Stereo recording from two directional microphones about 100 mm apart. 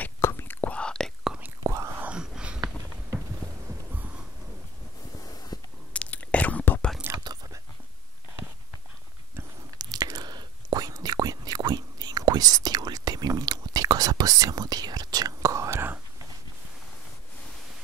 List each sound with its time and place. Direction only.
0.2 s whispering: 25° left (ahead or behind); by 1.1 s 10° left (ahead or behind)
1.6 s whispering: 35° right (ahead or behind)
2.0 s a sound: 10° right (ahead or behind)
5.2 s a sound: 40° left (ahead or behind)
5.9 s whispering: 15° left (ahead or behind)
7.2 s chewing: 40° right (ahead or behind)
9.8 s chewing: 40° right (ahead or behind); by 16.0 s 25° right (ahead or behind)